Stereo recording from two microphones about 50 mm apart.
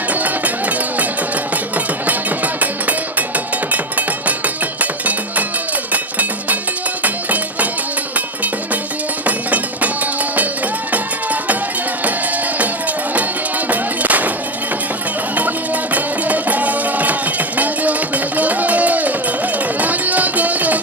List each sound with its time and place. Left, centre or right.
0.1 s a sound: right
1.7 s music: right
9.2 s music: right
10.9 s music: right
13.7 s music: right
15.4 s music: right